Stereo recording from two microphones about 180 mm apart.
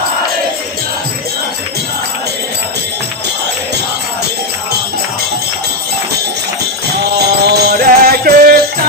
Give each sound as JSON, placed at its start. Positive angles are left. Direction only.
{"t": 7.0, "sound": "music", "side_deg": -65}